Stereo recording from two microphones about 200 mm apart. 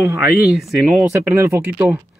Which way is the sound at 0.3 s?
Centre (ahead or behind).